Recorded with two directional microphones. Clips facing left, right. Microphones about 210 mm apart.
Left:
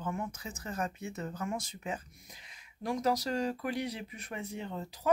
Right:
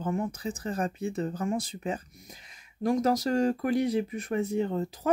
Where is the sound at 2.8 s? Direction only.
45° right (ahead or behind).